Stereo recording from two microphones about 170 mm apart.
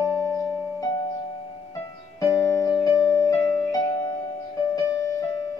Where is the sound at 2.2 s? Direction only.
20° left (ahead or behind).